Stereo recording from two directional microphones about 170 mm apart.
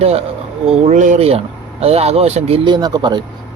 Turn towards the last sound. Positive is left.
turn(degrees=-25)  # may be behind; listen again after turning